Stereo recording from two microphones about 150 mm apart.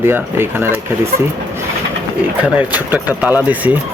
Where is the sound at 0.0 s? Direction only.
15° right (ahead or behind).